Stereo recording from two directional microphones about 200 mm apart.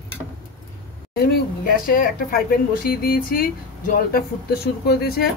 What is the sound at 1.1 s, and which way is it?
Speech, 45° left (ahead or behind).